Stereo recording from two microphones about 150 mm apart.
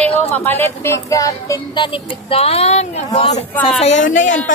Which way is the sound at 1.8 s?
35° left (ahead or behind).